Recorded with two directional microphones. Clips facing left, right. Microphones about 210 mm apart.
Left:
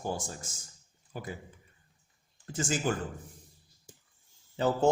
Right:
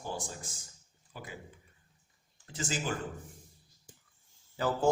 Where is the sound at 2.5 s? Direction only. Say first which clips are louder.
Left 5 dB; 50° left (ahead or behind).